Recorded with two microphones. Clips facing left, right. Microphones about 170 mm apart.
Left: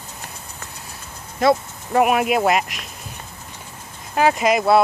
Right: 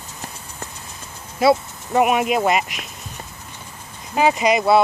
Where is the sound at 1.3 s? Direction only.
5° right (ahead or behind).